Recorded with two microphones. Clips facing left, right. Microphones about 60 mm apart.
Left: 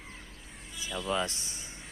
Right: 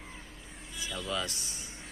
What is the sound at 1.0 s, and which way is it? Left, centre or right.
Speech, left.